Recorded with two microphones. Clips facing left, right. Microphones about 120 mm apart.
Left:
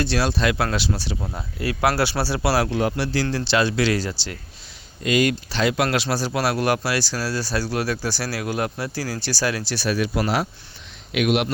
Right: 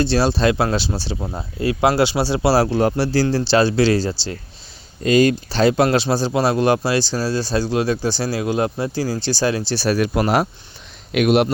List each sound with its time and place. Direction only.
0.0 s speech: 30° right (ahead or behind)